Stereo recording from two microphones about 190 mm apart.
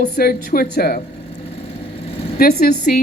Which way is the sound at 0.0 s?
50° left (ahead or behind).